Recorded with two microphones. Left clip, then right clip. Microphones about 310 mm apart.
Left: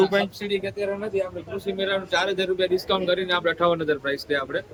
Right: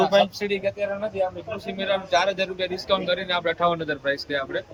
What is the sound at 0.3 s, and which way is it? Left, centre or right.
Speech, centre.